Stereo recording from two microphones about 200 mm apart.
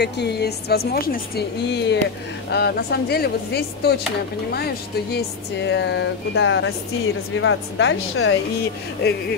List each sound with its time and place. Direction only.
0.0 s a woman's voice: 55° left (ahead or behind)
5.1 s speech: 60° left (ahead or behind); by 8.4 s 75° left (ahead or behind)
9.0 s a woman's voice: 55° left (ahead or behind)